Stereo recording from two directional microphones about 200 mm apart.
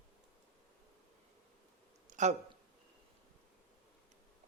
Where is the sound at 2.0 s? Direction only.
35° right (ahead or behind).